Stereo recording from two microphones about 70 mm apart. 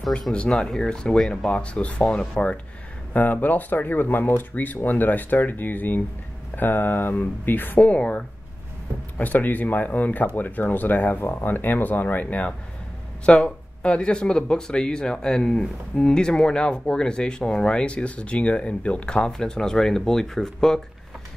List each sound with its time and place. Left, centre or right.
0.5 s speech: centre; by 7.8 s left
7.8 s speech: centre
9.2 s speech: left; by 20.8 s centre